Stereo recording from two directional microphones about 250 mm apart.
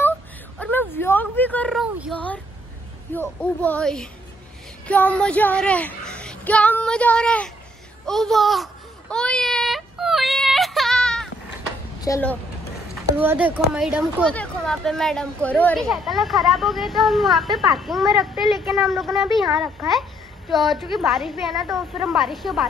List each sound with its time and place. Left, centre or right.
0.6 s a child's voice: centre
9.1 s yodeling: centre
12.0 s speech: centre
13.2 s a child's voice: centre